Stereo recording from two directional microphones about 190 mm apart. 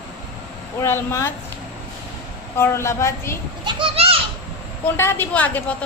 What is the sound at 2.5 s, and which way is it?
Speech, 15° left (ahead or behind).